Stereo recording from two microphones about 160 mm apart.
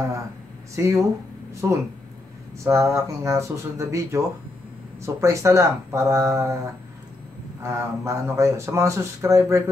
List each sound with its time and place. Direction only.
0.7 s speech: 20° right (ahead or behind)
7.6 s speech: 20° right (ahead or behind)